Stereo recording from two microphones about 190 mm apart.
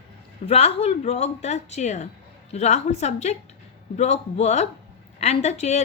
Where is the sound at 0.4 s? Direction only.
30° left (ahead or behind).